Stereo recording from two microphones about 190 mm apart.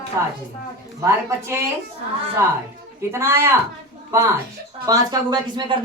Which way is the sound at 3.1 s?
10° right (ahead or behind).